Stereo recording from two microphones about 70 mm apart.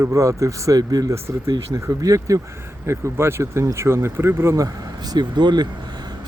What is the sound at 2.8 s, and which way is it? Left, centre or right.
Speech, right.